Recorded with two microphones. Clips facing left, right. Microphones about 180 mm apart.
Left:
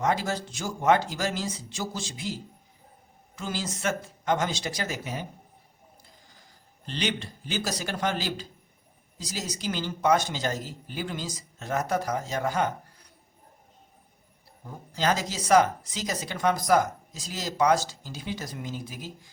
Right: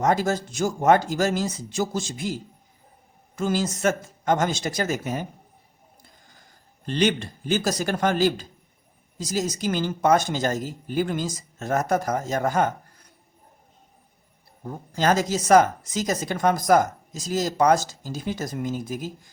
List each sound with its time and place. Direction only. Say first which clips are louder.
0.0 s speech: right 5 dB; 45° right (ahead or behind)
6.8 s speech: right 8 dB; 50° right (ahead or behind)
14.6 s speech: right 4 dB; 45° right (ahead or behind)